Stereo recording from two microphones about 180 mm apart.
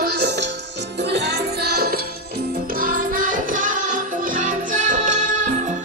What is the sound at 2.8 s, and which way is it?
Music, 50° right (ahead or behind).